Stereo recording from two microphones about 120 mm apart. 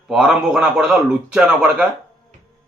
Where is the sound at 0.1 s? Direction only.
5° right (ahead or behind).